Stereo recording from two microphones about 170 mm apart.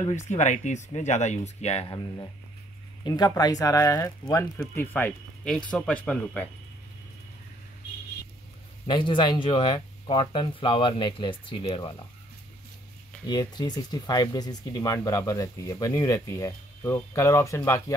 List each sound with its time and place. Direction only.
0.1 s speech: 45° left (ahead or behind)
3.0 s speech: 25° left (ahead or behind); by 6.5 s 10° left (ahead or behind)
8.8 s speech: 30° left (ahead or behind)
13.3 s speech: 25° left (ahead or behind)